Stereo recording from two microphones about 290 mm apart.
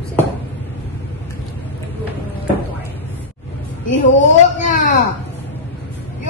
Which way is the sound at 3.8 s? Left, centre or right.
Left.